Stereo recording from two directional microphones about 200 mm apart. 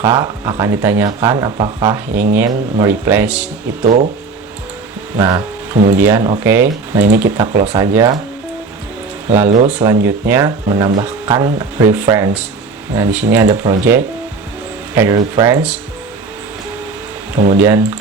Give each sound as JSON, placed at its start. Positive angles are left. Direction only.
{"t": 0.0, "sound": "speech", "side_deg": -15}
{"t": 3.8, "sound": "speech", "side_deg": -35}
{"t": 5.1, "sound": "speech", "side_deg": -20}
{"t": 9.5, "sound": "speech", "side_deg": -35}
{"t": 9.7, "sound": "speech", "side_deg": -15}
{"t": 15.1, "sound": "speech", "side_deg": -15}
{"t": 17.5, "sound": "speech", "side_deg": -10}